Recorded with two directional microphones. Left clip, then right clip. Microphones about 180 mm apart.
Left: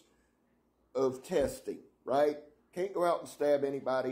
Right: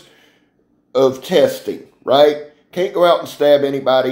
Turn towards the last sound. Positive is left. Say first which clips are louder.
# right 18 dB
turn(degrees=40)  # may be behind; listen again after turning